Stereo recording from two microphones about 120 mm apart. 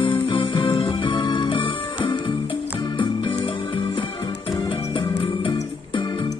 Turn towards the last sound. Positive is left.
turn(degrees=45)  # may be behind; listen again after turning